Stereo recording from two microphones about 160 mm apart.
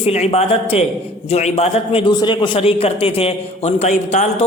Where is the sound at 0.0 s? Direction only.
40° left (ahead or behind).